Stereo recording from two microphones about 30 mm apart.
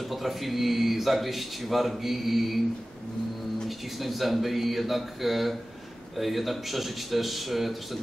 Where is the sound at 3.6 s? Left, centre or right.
Centre.